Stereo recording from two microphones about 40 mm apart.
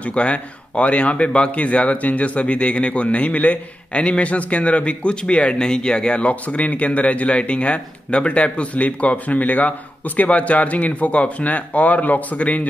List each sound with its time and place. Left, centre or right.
0.0 s a man's voice: left